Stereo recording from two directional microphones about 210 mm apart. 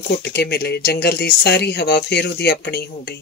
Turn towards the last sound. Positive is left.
turn(degrees=50)  # may be behind; listen again after turning